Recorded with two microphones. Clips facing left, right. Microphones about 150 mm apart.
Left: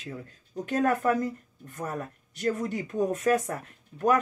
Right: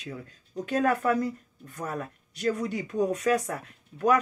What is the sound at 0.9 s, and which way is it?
Speech, 45° left (ahead or behind).